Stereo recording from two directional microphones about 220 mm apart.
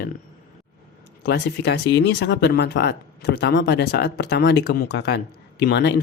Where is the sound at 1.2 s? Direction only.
50° left (ahead or behind).